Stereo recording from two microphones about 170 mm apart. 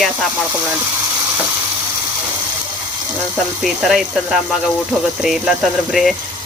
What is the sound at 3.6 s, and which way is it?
Speech, centre (ahead or behind).